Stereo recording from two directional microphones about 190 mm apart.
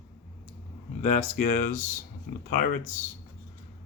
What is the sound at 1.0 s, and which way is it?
Speech, 40° left (ahead or behind).